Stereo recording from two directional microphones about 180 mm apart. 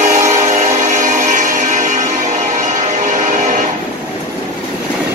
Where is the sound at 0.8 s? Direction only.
45° right (ahead or behind).